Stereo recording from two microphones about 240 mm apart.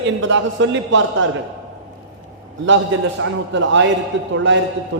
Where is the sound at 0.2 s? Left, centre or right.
Right.